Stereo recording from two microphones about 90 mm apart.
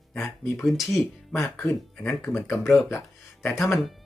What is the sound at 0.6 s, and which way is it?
Speech, 5° right (ahead or behind).